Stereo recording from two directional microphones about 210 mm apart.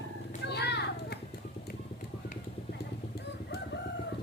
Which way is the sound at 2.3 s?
50° left (ahead or behind).